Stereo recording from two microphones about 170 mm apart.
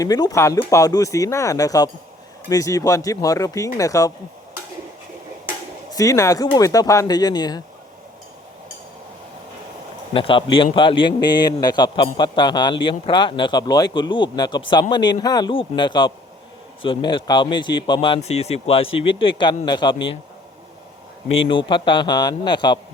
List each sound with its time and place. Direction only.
0.0 s a man's voice: 20° left (ahead or behind)
5.9 s a man's voice: 20° left (ahead or behind)
10.1 s a man's voice: 30° left (ahead or behind)
21.3 s a man's voice: 30° left (ahead or behind)